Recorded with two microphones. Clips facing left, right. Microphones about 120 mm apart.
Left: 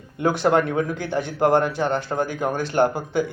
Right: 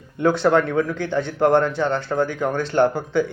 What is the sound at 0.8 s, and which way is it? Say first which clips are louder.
Speech: right 2 dB; 60° right (ahead or behind).